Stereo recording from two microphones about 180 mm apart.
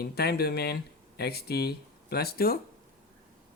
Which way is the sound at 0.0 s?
60° left (ahead or behind).